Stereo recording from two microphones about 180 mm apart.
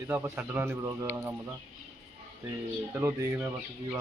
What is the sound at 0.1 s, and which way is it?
Speech, 10° right (ahead or behind).